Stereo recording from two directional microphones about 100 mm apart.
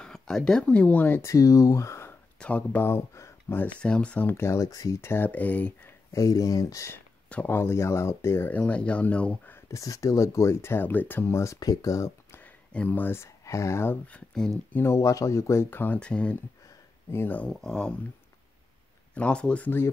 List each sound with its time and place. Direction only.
0.0 s speech: 5° left (ahead or behind)
1.2 s speech: 35° left (ahead or behind)
2.3 s speech: 15° left (ahead or behind)
3.8 s speech: 10° left (ahead or behind)
4.3 s speech: 25° left (ahead or behind)
6.1 s speech: 35° left (ahead or behind)
7.2 s speech: 15° left (ahead or behind)
9.7 s speech: 35° left (ahead or behind)
12.7 s speech: 15° left (ahead or behind)
14.0 s speech: 10° left (ahead or behind)
14.7 s speech: 25° left (ahead or behind)
17.5 s speech: 5° left (ahead or behind)
19.1 s speech: 10° left (ahead or behind)